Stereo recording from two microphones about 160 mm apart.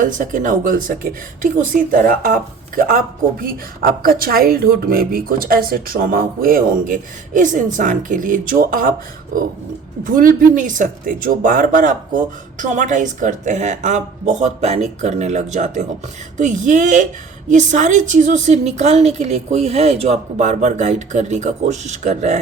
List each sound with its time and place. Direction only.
0.0 s speech: 55° right (ahead or behind)
10.0 s speech: 60° right (ahead or behind)